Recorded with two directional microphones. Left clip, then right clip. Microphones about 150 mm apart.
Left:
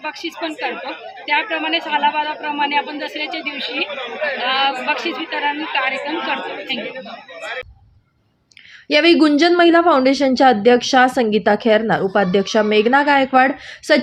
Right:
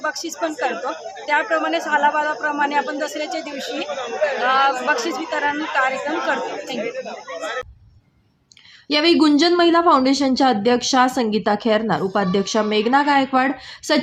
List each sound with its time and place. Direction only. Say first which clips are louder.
0.0 s a woman's voice: right 1 dB; 30° right (ahead or behind)
8.9 s a woman's voice: left 3 dB; 10° left (ahead or behind)